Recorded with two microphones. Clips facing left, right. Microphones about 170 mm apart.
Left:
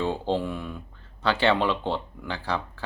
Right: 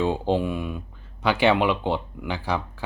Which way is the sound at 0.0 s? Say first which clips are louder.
Right 3 dB; 15° right (ahead or behind).